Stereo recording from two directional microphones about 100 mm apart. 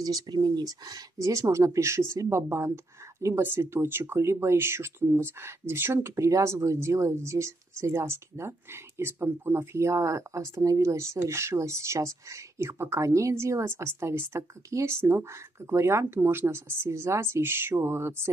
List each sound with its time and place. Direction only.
0.0 s speech: 40° right (ahead or behind); by 18.3 s 25° right (ahead or behind)